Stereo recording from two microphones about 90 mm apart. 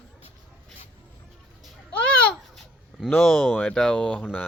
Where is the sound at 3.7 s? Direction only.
10° left (ahead or behind).